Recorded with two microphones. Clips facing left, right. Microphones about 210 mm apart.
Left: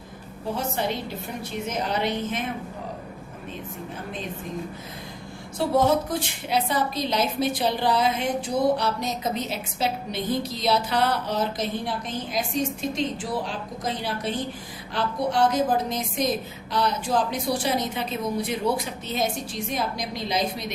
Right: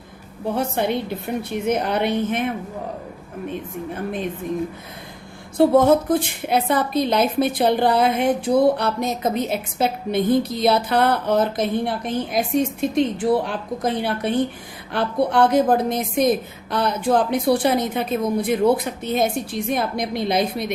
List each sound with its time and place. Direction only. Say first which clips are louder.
0.5 s a woman's voice: right 6 dB; 60° right (ahead or behind)
5.5 s a woman's voice: right 7 dB; 55° right (ahead or behind)